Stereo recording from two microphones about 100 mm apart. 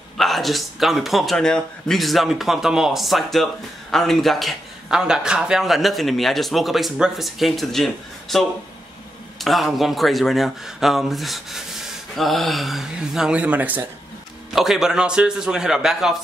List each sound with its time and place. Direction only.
0.2 s a man's voice: centre (ahead or behind); by 13.8 s 15° right (ahead or behind)
14.5 s a man's voice: centre (ahead or behind)